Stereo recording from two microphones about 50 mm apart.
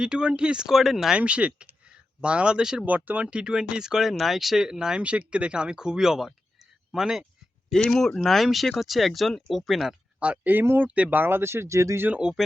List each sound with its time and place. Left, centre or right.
0.0 s speech: centre
0.7 s speech: centre
1.1 s speech: right
2.8 s speech: right
3.2 s speech: centre
5.0 s speech: right
7.7 s speech: centre
10.2 s speech: right
11.1 s speech: right
12.2 s speech: centre